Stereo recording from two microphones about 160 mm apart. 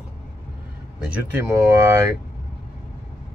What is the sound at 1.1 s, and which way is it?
Speech, 15° right (ahead or behind).